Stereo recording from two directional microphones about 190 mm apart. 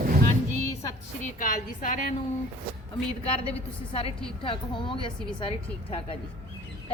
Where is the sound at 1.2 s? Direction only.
45° left (ahead or behind).